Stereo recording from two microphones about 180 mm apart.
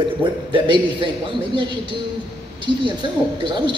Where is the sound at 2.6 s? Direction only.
25° right (ahead or behind).